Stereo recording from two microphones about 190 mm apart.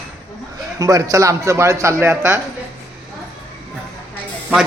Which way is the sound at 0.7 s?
15° right (ahead or behind).